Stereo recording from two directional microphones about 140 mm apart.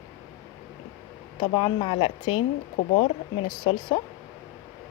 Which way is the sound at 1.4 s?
40° left (ahead or behind).